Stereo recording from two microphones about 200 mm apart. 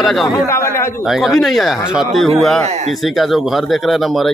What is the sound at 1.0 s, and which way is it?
Speech, centre (ahead or behind).